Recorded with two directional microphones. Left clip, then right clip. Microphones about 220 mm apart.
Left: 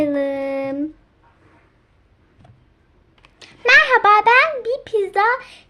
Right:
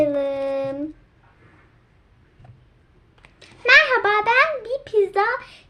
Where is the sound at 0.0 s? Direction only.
40° left (ahead or behind).